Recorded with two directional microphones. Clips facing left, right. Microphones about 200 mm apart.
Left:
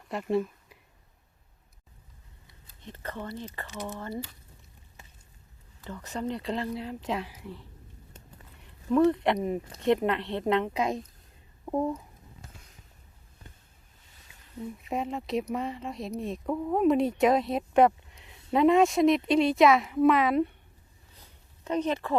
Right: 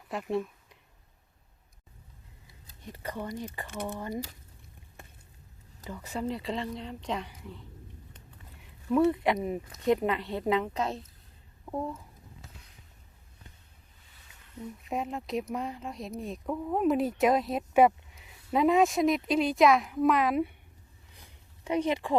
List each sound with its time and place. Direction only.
0.1 s a sound: centre (ahead or behind)
2.8 s speech: 10° right (ahead or behind)
3.7 s speech: 55° right (ahead or behind)
3.9 s speech: 15° right (ahead or behind)
5.0 s a sound: 55° right (ahead or behind)
5.8 s speech: 10° right (ahead or behind)
10.8 s a woman's voice: 10° left (ahead or behind)
14.8 s speech: centre (ahead or behind)
21.2 s a sound: 15° right (ahead or behind)